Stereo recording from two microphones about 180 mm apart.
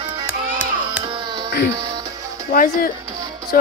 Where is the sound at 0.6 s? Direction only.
5° right (ahead or behind).